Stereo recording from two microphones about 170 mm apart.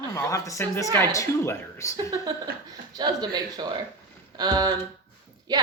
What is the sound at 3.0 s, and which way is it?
A woman's voice, 25° right (ahead or behind).